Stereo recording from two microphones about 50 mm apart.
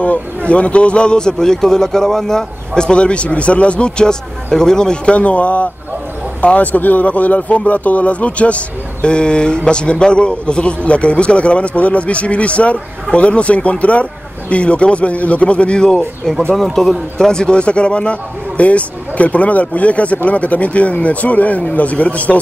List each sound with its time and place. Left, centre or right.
0.0 s speech: left
16.5 s speech: centre
17.3 s speech: centre